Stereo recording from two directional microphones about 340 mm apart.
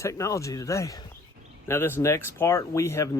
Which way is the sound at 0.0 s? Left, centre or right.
Centre.